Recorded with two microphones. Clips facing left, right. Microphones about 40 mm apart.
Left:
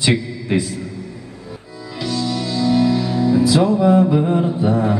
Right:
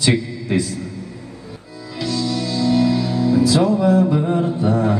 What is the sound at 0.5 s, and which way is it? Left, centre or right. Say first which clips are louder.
Speech: left 1 dB; left.